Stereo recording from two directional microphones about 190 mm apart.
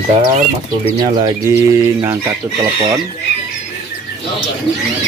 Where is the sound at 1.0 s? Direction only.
20° right (ahead or behind).